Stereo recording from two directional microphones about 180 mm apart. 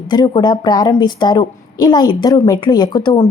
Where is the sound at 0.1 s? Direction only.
25° left (ahead or behind).